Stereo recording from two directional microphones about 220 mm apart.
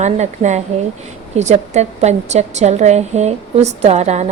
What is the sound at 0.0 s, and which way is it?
A woman's voice, 30° right (ahead or behind).